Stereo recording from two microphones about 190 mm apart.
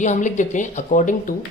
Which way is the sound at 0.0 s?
40° left (ahead or behind).